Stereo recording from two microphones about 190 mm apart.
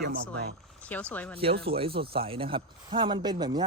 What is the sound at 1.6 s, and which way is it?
A man's voice, 30° right (ahead or behind).